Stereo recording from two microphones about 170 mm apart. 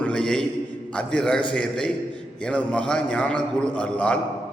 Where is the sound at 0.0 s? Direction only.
5° left (ahead or behind).